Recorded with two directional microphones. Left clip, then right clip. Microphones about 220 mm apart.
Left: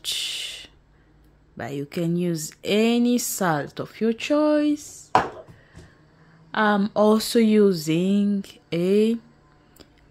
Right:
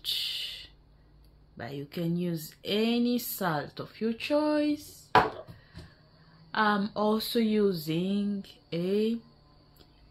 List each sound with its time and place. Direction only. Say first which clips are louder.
0.0 s a sound: left 4 dB; 55° left (ahead or behind)
1.6 s speech: left 8 dB; 55° left (ahead or behind)
6.5 s speech: left 6 dB; 45° left (ahead or behind)